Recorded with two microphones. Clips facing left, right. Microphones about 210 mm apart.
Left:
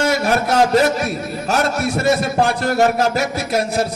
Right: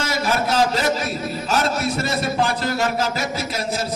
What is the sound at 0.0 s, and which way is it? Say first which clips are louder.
A man's voice: left 5 dB; 60° left (ahead or behind).